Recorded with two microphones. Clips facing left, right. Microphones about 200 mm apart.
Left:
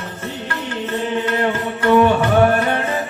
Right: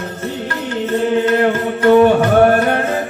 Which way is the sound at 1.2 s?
45° right (ahead or behind).